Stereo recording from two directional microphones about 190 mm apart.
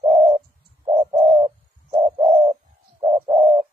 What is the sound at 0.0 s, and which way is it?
Bird, 35° right (ahead or behind).